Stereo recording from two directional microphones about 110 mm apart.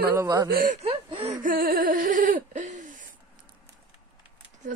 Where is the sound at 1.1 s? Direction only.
65° right (ahead or behind).